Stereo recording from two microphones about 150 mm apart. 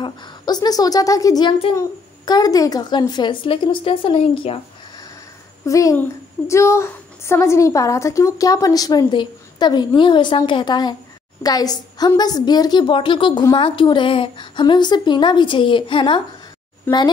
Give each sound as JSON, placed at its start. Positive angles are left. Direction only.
{"t": 0.0, "sound": "a woman's voice", "side_deg": 30}
{"t": 5.7, "sound": "a woman's voice", "side_deg": 20}
{"t": 16.9, "sound": "speech", "side_deg": 15}